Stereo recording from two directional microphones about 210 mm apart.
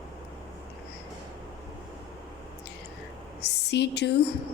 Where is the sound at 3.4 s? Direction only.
55° left (ahead or behind).